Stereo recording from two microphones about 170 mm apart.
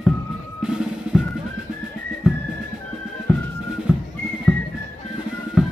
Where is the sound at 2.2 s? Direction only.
5° right (ahead or behind).